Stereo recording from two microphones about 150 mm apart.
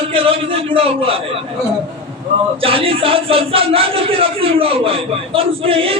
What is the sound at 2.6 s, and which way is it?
Speech, 40° right (ahead or behind).